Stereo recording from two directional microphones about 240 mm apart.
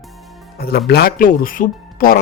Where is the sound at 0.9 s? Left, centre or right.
Left.